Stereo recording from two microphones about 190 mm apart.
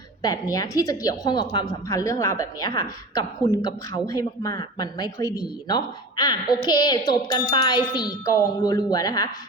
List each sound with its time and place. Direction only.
0.2 s a woman's voice: 20° left (ahead or behind)